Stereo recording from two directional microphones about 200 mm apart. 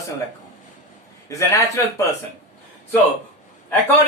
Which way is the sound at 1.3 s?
15° left (ahead or behind).